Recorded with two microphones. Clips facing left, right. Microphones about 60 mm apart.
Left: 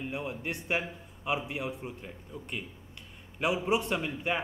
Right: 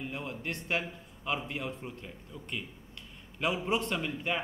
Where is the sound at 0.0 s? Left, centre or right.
Centre.